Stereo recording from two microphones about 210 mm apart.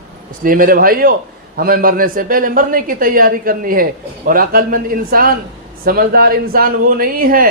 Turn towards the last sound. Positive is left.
turn(degrees=-45)  # may be behind; listen again after turning